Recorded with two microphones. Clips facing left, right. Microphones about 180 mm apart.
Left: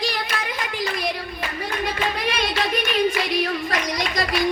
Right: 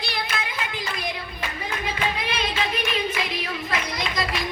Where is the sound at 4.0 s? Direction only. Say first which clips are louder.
Left 3 dB; 45° left (ahead or behind).